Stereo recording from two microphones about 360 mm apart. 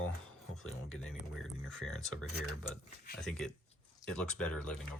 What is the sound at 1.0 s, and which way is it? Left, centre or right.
Speech, centre.